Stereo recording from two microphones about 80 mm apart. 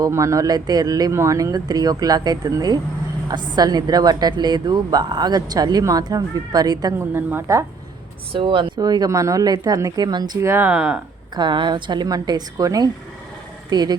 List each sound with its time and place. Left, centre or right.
0.1 s speech: right
1.1 s speech: right
3.2 s a woman's voice: right
7.0 s a woman's voice: right
8.4 s speech: right
8.8 s speech: right
10.4 s speech: right
10.7 s speech: centre
11.3 s a woman's voice: right